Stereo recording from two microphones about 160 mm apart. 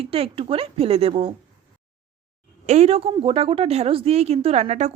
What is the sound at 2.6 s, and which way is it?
Speech, 45° right (ahead or behind).